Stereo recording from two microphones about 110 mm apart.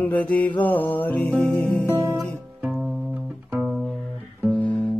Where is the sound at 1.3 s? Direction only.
Centre (ahead or behind).